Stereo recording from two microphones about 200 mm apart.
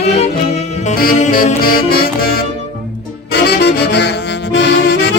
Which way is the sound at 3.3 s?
55° left (ahead or behind).